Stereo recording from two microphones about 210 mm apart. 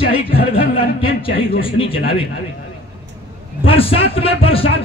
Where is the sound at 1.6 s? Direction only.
25° left (ahead or behind).